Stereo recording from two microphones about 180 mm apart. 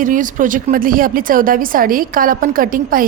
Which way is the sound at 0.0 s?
45° right (ahead or behind).